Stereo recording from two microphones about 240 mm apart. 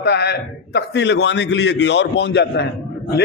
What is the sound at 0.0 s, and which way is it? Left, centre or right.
A man's voice, left.